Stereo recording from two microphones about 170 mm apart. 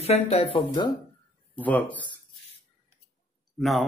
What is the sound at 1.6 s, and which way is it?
Speech, 10° left (ahead or behind).